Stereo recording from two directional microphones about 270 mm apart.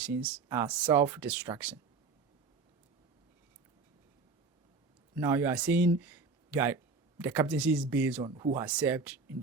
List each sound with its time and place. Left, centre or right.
0.0 s speech: centre
5.1 s speech: centre
6.0 s a sound: centre
7.2 s speech: centre
8.3 s speech: centre
8.5 s speech: centre